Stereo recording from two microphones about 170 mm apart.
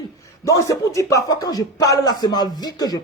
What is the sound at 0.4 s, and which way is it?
Speech, 20° left (ahead or behind).